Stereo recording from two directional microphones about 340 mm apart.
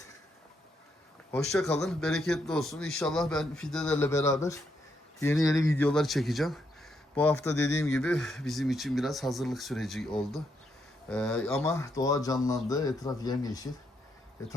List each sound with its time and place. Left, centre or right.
1.3 s a man's voice: centre
7.5 s speech: left
7.8 s a man's voice: centre